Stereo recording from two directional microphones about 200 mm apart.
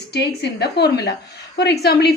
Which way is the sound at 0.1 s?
55° left (ahead or behind).